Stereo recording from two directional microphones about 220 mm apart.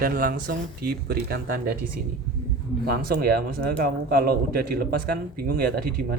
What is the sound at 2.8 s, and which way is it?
Speech, 45° right (ahead or behind).